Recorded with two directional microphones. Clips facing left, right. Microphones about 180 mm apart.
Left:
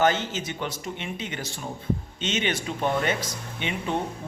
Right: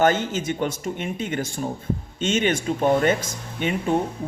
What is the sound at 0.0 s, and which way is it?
Speech, 50° right (ahead or behind).